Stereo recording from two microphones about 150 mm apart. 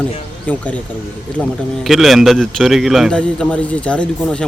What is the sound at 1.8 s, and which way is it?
A man's voice, centre (ahead or behind).